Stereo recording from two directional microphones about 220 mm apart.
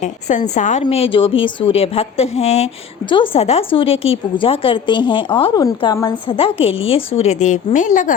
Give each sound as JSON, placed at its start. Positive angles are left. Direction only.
{"t": 0.0, "sound": "a woman's voice", "side_deg": 30}